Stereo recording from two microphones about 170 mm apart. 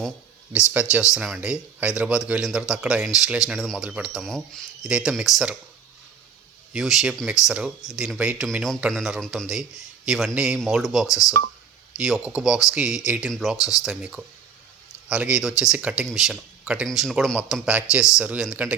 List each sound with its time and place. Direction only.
0.5 s speech: 5° right (ahead or behind)
6.7 s speech: centre (ahead or behind)